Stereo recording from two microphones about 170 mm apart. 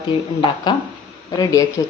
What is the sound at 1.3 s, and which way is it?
Speech, 25° left (ahead or behind).